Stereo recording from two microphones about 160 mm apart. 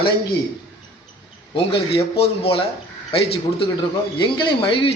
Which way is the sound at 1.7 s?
35° left (ahead or behind).